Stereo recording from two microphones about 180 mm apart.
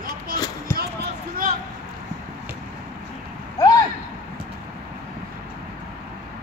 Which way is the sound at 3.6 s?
20° left (ahead or behind).